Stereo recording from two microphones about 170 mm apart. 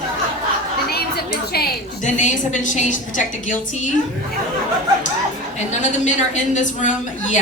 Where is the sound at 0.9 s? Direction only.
65° left (ahead or behind).